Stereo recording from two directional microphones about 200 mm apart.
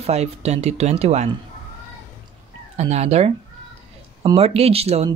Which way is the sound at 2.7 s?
30° right (ahead or behind).